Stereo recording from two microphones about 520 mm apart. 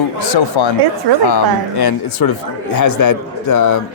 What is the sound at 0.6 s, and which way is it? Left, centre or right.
Speech, left.